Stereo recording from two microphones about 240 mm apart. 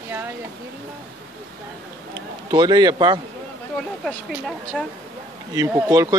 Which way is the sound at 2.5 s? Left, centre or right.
Centre.